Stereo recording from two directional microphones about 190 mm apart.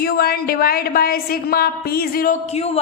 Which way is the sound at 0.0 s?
55° left (ahead or behind).